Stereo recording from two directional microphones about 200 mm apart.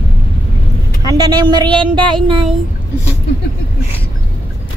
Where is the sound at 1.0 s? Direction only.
20° right (ahead or behind).